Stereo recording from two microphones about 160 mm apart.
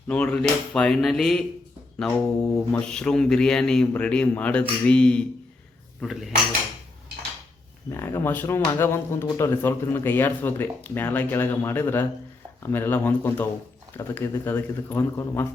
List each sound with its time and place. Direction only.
0.1 s speech: 10° left (ahead or behind)
7.9 s speech: 15° left (ahead or behind)